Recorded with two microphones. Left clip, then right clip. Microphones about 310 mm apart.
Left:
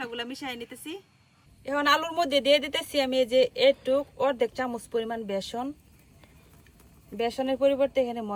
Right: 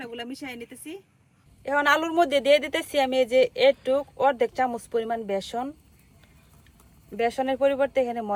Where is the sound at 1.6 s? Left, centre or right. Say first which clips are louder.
Right 2 dB; right.